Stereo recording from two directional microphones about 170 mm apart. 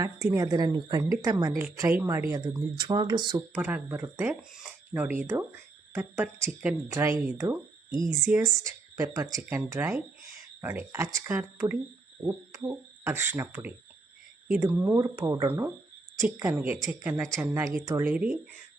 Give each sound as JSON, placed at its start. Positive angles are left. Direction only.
{"t": 0.0, "sound": "speech", "side_deg": -20}
{"t": 3.5, "sound": "speech", "side_deg": -10}
{"t": 17.4, "sound": "speech", "side_deg": -20}
{"t": 18.1, "sound": "speech", "side_deg": -5}